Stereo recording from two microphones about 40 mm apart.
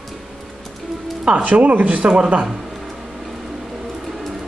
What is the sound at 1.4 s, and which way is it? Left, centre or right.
Speech, right.